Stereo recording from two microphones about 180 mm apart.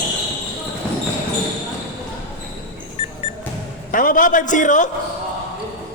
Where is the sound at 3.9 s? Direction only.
50° left (ahead or behind).